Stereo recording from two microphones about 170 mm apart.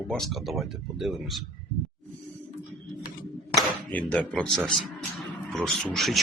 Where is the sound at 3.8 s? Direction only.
10° left (ahead or behind).